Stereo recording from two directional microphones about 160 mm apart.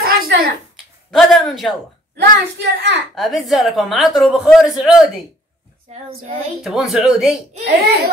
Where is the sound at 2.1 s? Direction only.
90° right.